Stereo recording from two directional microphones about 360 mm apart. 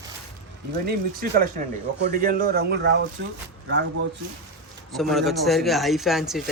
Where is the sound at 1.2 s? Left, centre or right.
Right.